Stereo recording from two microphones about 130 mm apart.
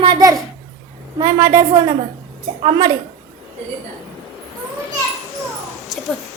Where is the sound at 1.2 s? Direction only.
20° right (ahead or behind).